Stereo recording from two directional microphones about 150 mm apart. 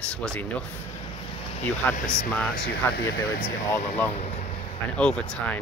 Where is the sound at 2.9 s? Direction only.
90° left.